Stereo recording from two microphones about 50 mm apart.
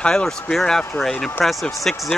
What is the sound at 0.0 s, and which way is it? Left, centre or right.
Speech, centre.